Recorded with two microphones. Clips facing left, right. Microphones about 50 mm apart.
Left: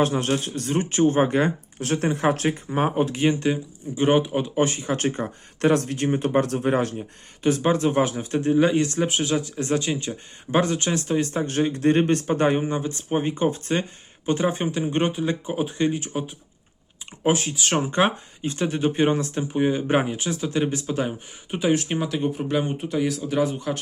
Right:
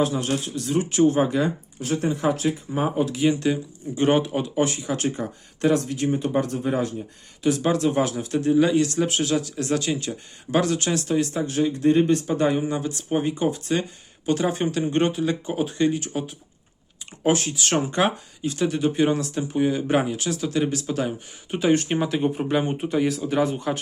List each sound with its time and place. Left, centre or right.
0.0 s speech: left
1.5 s speech: left
2.5 s speech: left
3.4 s speech: centre
4.5 s speech: left
7.6 s speech: left; by 17.8 s centre
17.9 s speech: left
21.5 s speech: centre